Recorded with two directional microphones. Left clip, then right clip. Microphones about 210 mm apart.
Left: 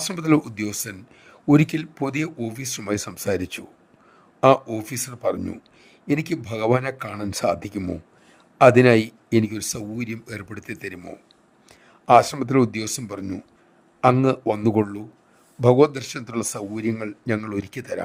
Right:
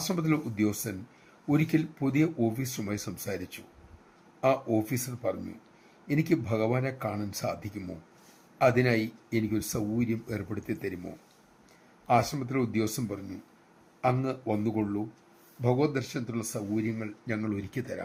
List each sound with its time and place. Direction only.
0.0 s speech: 55° left (ahead or behind)